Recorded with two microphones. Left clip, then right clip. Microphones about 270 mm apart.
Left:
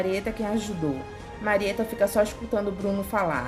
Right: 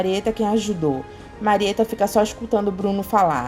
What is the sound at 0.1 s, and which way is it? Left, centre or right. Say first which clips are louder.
A woman's voice: right 7 dB; centre.